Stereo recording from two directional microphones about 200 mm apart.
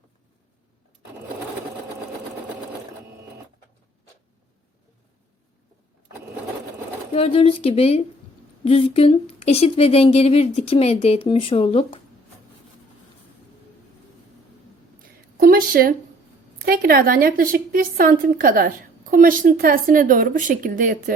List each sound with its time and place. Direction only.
7.1 s speech: 30° left (ahead or behind)
15.4 s a sound: 45° right (ahead or behind)
16.6 s a woman's voice: 45° right (ahead or behind)